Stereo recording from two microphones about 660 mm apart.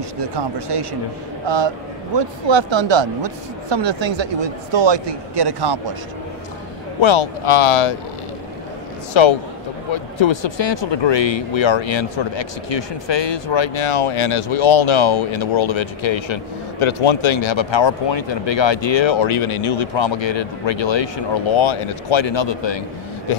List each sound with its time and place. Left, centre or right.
0.2 s speech: right
7.0 s speech: left
9.1 s speech: left